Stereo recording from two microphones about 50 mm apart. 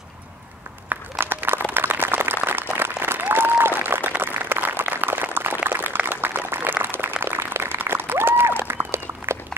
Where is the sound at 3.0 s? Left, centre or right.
Right.